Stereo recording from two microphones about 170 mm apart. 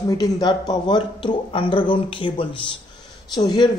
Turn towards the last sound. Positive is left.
turn(degrees=25)  # may be behind; listen again after turning